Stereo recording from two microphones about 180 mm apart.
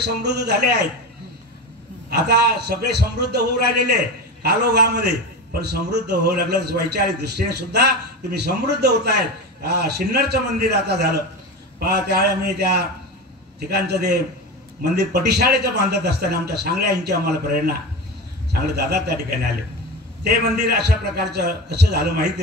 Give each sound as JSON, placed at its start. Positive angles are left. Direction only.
{"t": 0.0, "sound": "a man's voice", "side_deg": -65}
{"t": 2.0, "sound": "a man's voice", "side_deg": -65}
{"t": 20.2, "sound": "a man's voice", "side_deg": -60}